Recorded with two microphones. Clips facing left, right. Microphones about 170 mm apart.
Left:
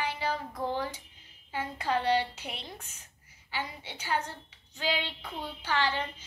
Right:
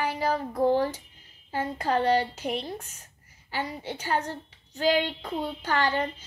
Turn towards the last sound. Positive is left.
turn(degrees=-45)  # may be behind; listen again after turning